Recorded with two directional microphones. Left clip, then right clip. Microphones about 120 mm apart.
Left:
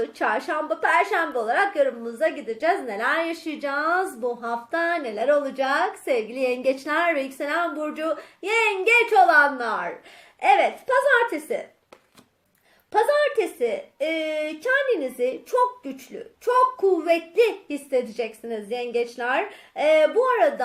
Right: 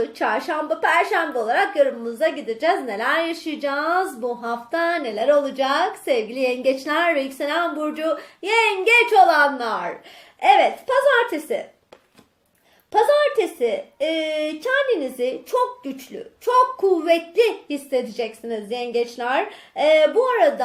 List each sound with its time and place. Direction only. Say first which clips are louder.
0.0 s a woman's voice: right 2 dB; 20° left (ahead or behind)
12.9 s a woman's voice: right 3 dB; 20° left (ahead or behind)